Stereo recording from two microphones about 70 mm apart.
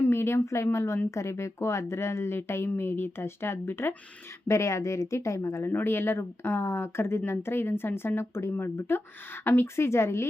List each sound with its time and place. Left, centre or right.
0.0 s a woman's voice: left